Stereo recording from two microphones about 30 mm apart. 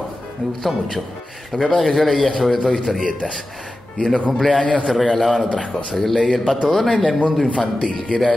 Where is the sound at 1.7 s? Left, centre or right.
Centre.